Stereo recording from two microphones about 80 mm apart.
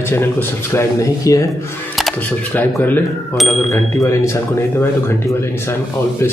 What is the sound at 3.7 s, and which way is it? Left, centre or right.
Speech, left.